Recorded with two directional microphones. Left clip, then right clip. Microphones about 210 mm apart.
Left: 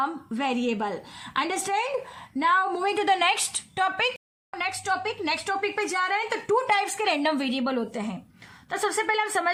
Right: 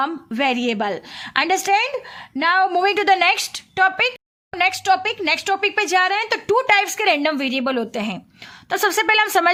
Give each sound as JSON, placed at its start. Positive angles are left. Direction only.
{"t": 0.0, "sound": "a woman's voice", "side_deg": -40}
{"t": 4.5, "sound": "a woman's voice", "side_deg": -40}